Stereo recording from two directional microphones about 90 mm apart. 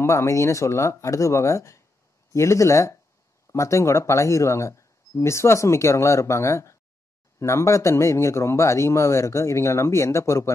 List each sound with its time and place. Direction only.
0.0 s speech: 35° left (ahead or behind)